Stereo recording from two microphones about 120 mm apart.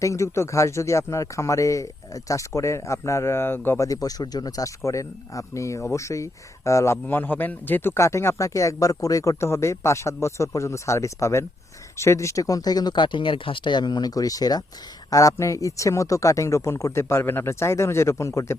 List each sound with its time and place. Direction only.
0.0 s a man's voice: 25° left (ahead or behind)
3.8 s a man's voice: 30° left (ahead or behind)